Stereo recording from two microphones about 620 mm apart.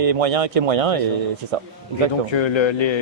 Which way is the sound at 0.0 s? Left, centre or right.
Right.